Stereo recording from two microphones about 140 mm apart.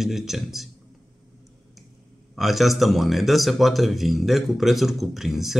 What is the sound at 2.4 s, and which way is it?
A man's voice, centre (ahead or behind).